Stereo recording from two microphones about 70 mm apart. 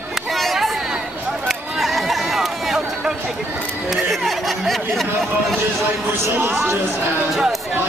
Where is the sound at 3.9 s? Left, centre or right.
Centre.